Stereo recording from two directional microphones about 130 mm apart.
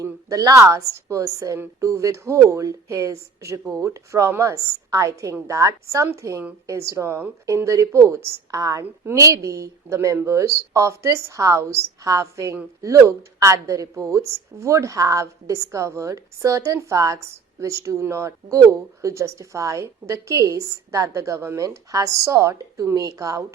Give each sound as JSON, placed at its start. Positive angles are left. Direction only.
{"t": 0.0, "sound": "a woman's voice", "side_deg": -25}